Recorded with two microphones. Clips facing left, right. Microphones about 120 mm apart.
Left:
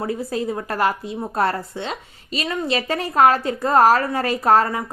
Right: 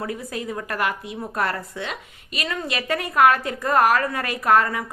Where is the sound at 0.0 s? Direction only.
30° left (ahead or behind).